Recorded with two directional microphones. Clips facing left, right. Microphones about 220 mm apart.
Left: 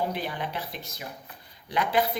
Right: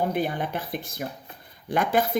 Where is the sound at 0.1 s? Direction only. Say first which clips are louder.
Right 5 dB; 50° right (ahead or behind).